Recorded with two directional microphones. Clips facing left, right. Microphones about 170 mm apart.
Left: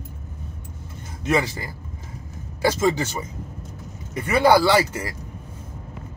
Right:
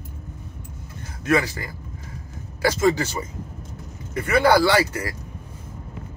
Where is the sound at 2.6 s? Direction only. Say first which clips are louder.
Right 1 dB; 15° left (ahead or behind).